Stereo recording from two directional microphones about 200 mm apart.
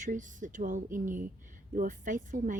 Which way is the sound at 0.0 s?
40° right (ahead or behind).